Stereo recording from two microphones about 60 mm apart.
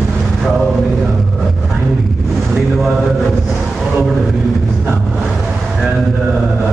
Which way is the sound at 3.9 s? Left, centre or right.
Centre.